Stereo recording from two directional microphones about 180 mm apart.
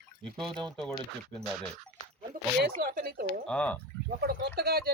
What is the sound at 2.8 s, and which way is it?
Speech, 60° right (ahead or behind).